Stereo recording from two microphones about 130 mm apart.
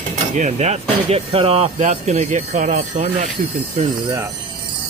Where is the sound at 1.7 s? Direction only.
70° right (ahead or behind).